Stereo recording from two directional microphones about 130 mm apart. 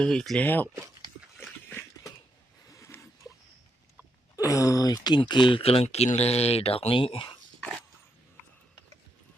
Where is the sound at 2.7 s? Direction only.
20° left (ahead or behind).